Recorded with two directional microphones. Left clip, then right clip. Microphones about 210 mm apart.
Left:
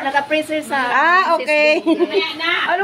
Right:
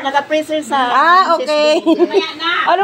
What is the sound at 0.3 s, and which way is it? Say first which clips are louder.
A woman's voice: right 3 dB; 5° right (ahead or behind).